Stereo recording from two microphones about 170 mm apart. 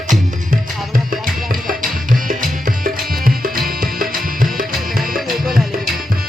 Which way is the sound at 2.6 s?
55° right (ahead or behind).